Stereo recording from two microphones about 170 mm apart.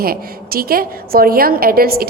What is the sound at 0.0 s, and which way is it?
A woman's voice, 60° right (ahead or behind).